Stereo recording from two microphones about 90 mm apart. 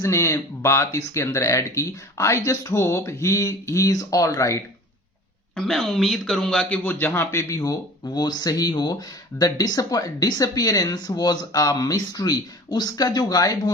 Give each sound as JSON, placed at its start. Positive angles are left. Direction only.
{"t": 0.0, "sound": "speech", "side_deg": 30}
{"t": 5.5, "sound": "speech", "side_deg": 5}
{"t": 6.8, "sound": "speech", "side_deg": 25}